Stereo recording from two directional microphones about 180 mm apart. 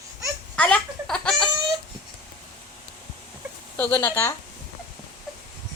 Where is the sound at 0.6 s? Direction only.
5° left (ahead or behind).